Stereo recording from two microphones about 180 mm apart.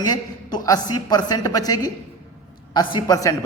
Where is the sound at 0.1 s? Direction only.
20° left (ahead or behind).